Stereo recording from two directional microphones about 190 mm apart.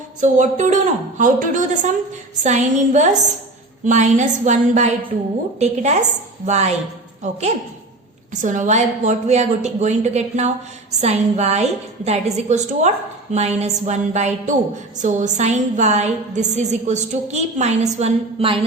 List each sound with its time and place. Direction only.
0.2 s a woman's voice: 40° right (ahead or behind)